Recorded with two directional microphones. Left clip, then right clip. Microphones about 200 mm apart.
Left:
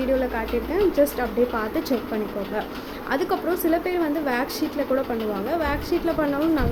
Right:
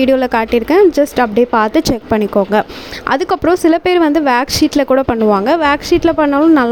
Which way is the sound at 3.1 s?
45° right (ahead or behind).